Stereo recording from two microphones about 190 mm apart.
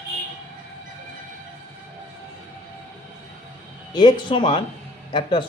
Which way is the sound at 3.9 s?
25° left (ahead or behind).